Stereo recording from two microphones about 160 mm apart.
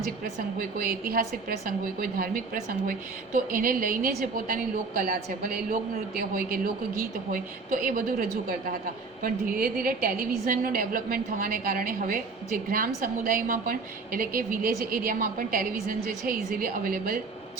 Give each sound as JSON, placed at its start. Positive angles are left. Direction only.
{"t": 0.3, "sound": "a woman's voice", "side_deg": -65}